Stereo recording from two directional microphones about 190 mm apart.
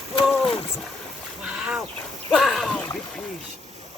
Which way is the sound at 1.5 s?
5° right (ahead or behind).